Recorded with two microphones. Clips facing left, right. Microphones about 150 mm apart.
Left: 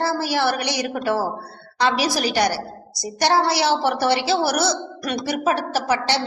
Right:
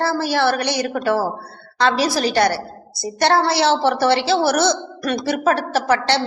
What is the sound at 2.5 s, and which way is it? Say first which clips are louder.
Speech: right 3 dB; 55° right (ahead or behind).